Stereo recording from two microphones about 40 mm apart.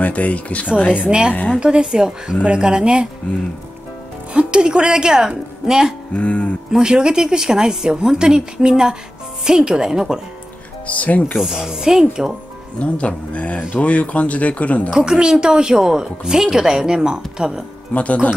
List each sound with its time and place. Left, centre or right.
0.0 s speech: left
1.0 s a woman's voice: right
4.3 s a woman's voice: right
6.1 s speech: left
6.8 s a woman's voice: right
10.9 s speech: left
11.3 s a woman's voice: centre
12.7 s speech: left
15.0 s a woman's voice: centre
17.9 s speech: left